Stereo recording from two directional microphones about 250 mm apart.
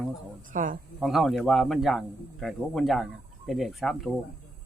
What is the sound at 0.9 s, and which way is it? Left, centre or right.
Speech, centre.